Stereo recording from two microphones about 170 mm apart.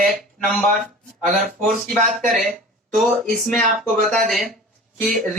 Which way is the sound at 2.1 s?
50° right (ahead or behind).